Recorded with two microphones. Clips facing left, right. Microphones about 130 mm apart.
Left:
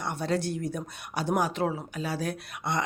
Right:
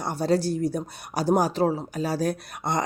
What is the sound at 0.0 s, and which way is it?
Speech, 35° right (ahead or behind).